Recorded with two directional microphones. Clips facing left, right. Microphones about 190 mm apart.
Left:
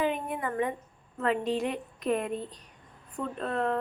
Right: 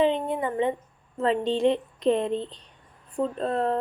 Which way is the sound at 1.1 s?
30° right (ahead or behind).